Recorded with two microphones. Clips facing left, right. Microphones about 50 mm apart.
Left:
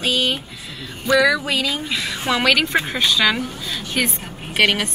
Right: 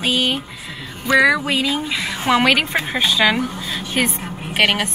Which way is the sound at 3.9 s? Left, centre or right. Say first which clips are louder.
Right 2 dB; right.